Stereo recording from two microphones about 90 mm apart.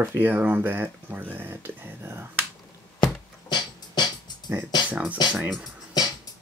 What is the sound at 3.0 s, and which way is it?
Music, 55° left (ahead or behind).